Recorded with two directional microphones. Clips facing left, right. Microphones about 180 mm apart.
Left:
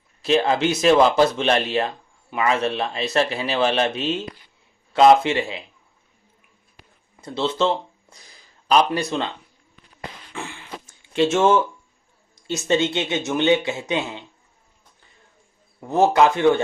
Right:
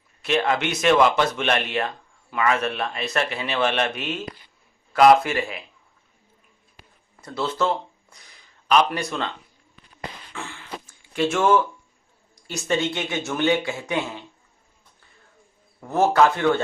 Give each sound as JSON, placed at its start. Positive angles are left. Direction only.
{"t": 0.2, "sound": "speech", "side_deg": 30}
{"t": 7.2, "sound": "speech", "side_deg": 25}
{"t": 10.3, "sound": "a sound", "side_deg": 15}
{"t": 11.1, "sound": "speech", "side_deg": 25}
{"t": 15.9, "sound": "speech", "side_deg": 20}